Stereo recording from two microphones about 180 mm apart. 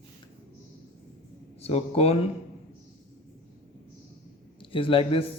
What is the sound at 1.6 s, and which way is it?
Speech, 35° left (ahead or behind).